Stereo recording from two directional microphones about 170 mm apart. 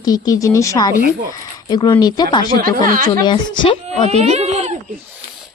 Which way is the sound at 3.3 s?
30° left (ahead or behind).